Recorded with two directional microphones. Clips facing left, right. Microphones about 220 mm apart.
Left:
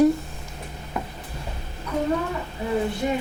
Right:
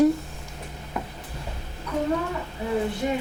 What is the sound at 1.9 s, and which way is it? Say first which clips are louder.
Speech: left 1 dB; 25° left (ahead or behind).